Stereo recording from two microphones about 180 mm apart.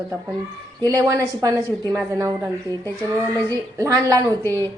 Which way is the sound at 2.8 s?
10° left (ahead or behind).